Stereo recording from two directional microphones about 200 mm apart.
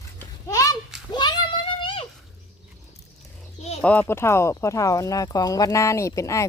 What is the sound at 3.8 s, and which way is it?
Speech, 5° left (ahead or behind).